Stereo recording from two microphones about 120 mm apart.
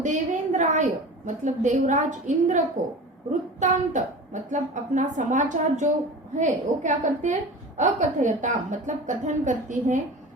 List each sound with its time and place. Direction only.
0.0 s a woman's voice: 90° right